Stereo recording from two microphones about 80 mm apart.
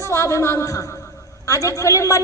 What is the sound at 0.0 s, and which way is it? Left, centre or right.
A woman's voice, left.